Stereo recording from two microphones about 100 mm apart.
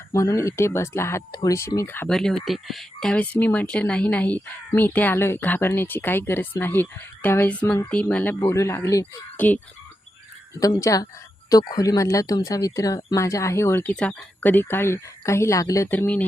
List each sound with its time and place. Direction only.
0.1 s speech: 30° left (ahead or behind)
1.3 s speech: 40° left (ahead or behind)
1.5 s speech: 30° left (ahead or behind)
2.0 s speech: 5° left (ahead or behind)
3.3 s speech: 15° left (ahead or behind); by 9.2 s 35° left (ahead or behind)
9.4 s speech: 15° left (ahead or behind)
10.8 s speech: 30° left (ahead or behind)
13.8 s speech: 10° left (ahead or behind); by 15.9 s 35° left (ahead or behind)
15.9 s speech: 15° left (ahead or behind)